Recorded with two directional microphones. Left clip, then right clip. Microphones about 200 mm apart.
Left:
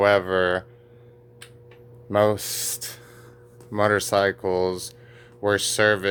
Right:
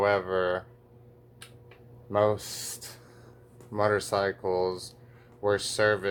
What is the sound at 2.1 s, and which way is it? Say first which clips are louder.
Speech: left 5 dB; 50° left (ahead or behind).